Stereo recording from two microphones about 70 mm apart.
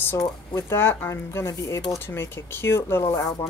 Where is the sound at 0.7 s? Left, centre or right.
Left.